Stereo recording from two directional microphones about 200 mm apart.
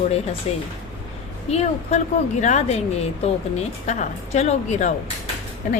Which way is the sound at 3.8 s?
35° left (ahead or behind).